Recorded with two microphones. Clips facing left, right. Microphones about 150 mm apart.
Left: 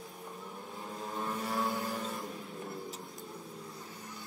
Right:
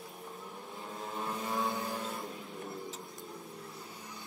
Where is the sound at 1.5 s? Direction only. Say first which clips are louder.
Even; 20° right (ahead or behind).